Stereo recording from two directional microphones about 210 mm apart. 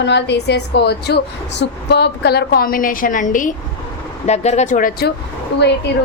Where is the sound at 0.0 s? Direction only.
55° left (ahead or behind).